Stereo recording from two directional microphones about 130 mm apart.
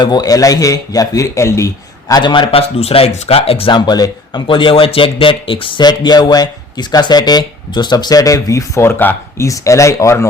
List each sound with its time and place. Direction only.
0.0 s a man's voice: 30° left (ahead or behind)